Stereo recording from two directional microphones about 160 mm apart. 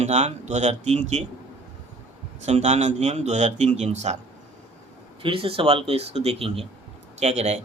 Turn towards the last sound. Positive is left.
turn(degrees=-40)  # may be behind; listen again after turning